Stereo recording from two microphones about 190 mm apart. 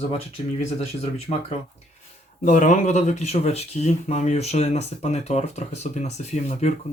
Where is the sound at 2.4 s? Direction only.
40° left (ahead or behind).